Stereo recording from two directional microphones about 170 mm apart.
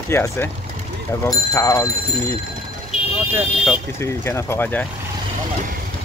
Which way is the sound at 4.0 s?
15° left (ahead or behind).